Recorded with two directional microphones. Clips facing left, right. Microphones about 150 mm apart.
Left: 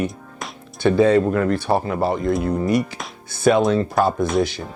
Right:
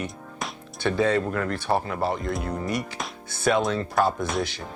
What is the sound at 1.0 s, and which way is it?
Speech, 15° left (ahead or behind).